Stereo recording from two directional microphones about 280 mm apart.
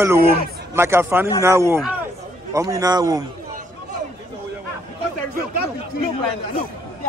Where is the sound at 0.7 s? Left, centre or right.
Centre.